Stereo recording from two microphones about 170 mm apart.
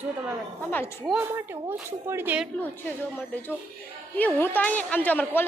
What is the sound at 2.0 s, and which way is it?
Speech, 10° right (ahead or behind).